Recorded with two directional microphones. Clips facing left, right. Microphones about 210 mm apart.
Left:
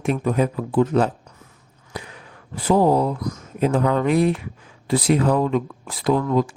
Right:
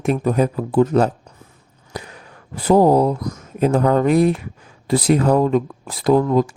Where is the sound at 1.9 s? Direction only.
40° right (ahead or behind).